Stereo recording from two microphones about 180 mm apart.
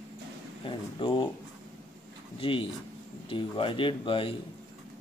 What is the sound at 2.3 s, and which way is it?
Speech, 30° left (ahead or behind).